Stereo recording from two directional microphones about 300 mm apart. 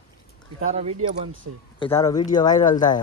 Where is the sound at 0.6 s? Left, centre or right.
Right.